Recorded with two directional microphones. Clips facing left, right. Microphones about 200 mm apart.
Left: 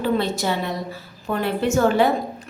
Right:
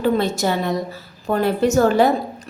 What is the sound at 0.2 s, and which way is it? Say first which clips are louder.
A woman's voice: right 3 dB; 45° right (ahead or behind).